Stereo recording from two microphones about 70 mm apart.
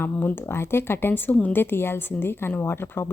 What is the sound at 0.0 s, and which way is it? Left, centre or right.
Speech, left.